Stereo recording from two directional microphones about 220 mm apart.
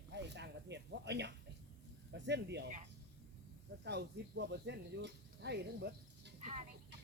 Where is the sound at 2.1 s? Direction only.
50° right (ahead or behind).